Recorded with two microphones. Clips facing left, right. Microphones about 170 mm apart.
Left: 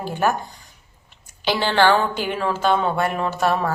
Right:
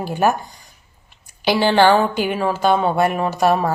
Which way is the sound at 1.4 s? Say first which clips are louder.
Right 4 dB; 15° right (ahead or behind).